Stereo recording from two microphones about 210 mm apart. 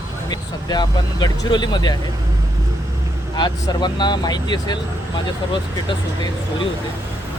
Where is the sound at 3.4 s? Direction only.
20° left (ahead or behind).